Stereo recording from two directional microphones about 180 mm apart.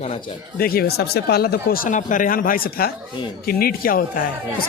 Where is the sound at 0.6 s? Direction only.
55° left (ahead or behind).